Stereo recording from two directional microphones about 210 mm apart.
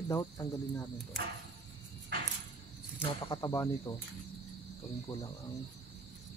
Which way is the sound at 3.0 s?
20° left (ahead or behind).